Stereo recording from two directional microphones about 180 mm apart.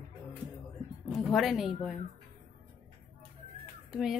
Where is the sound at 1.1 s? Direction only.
Centre (ahead or behind).